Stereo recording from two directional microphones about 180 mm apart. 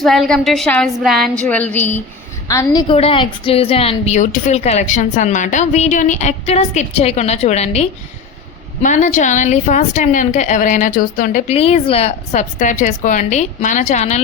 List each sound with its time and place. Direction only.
0.0 s a woman's voice: centre (ahead or behind); by 2.8 s 20° left (ahead or behind)
2.9 s a woman's voice: 30° left (ahead or behind); by 11.5 s 50° left (ahead or behind)
11.5 s a woman's voice: 35° left (ahead or behind)